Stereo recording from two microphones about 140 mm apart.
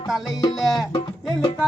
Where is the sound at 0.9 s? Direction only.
35° left (ahead or behind).